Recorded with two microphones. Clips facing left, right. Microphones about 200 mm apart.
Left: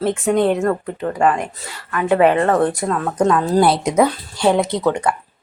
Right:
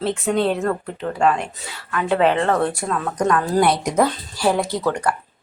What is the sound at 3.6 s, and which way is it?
Speech, 30° left (ahead or behind).